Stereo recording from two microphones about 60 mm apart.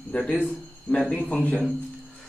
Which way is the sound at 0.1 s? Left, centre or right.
Centre.